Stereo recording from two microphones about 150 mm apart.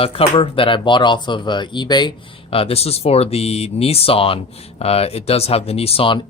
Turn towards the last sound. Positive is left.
turn(degrees=35)  # may be behind; listen again after turning